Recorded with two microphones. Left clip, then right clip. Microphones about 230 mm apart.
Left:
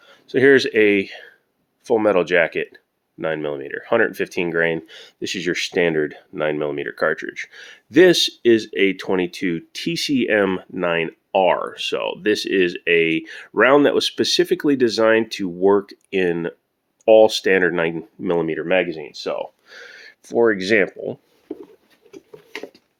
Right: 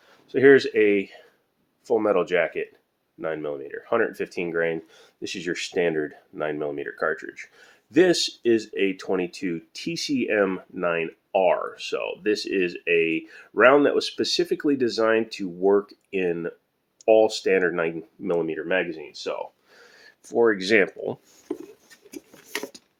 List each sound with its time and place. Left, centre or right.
0.3 s speech: left
20.8 s speech: centre
21.5 s a sound: right